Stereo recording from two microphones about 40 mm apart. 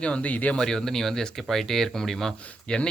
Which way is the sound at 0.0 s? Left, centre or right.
Left.